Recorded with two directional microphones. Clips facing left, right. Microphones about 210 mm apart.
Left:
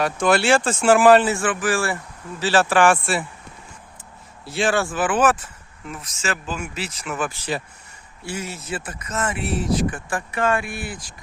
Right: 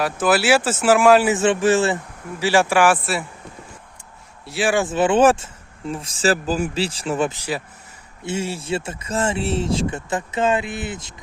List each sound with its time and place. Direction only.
0.0 s speech: 5° right (ahead or behind)
1.2 s speech: 20° right (ahead or behind); by 3.2 s 5° right (ahead or behind)
4.4 s speech: 5° right (ahead or behind)
4.7 s speech: 20° right (ahead or behind)